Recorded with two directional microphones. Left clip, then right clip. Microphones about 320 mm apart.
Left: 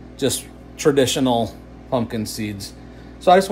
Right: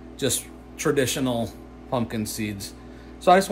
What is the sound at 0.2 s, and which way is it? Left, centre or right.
Speech, centre.